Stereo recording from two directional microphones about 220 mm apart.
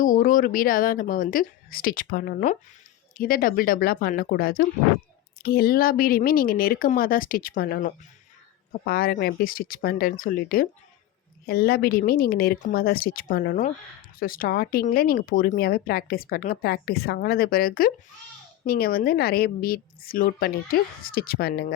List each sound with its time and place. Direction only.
0.0 s speech: 35° left (ahead or behind)